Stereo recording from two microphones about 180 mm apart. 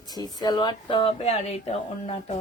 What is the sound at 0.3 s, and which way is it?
Speech, 20° left (ahead or behind).